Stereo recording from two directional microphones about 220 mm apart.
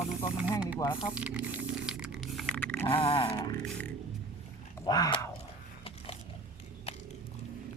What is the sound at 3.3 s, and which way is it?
Speech, 10° left (ahead or behind).